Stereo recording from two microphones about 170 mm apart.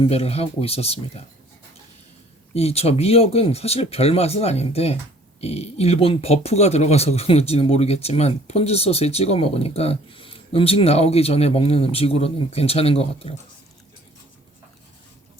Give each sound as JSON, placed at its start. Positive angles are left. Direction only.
{"t": 0.0, "sound": "speech", "side_deg": 35}
{"t": 2.6, "sound": "speech", "side_deg": 35}